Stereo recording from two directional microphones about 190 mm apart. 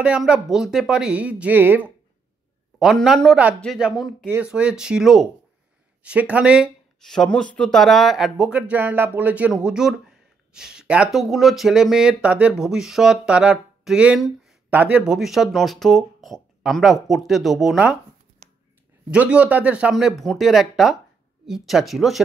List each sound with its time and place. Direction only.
0.0 s speech: 5° right (ahead or behind)
18.4 s a sound: 35° right (ahead or behind)
19.0 s speech: 5° right (ahead or behind)